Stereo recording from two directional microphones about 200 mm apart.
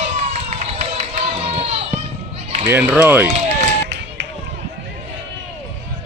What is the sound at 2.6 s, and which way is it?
Speech, 10° right (ahead or behind).